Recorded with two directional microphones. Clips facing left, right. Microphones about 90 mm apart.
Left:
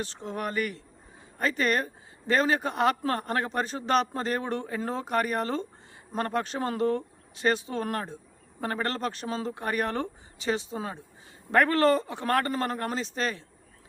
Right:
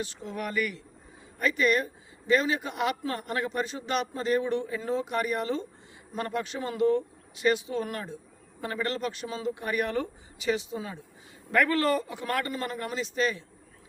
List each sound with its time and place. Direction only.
0.0 s speech: 35° left (ahead or behind)